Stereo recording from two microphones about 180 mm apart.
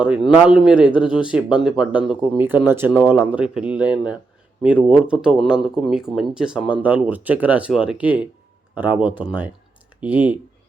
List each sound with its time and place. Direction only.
0.0 s speech: 5° right (ahead or behind)